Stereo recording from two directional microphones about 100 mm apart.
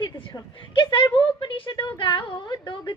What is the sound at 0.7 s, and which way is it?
A woman's voice, 55° left (ahead or behind).